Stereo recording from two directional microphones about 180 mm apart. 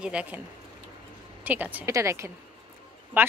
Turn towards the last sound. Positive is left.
turn(degrees=-10)  # may be behind; listen again after turning